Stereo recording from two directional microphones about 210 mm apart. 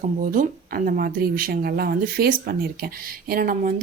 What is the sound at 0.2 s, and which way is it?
Speech, 40° right (ahead or behind).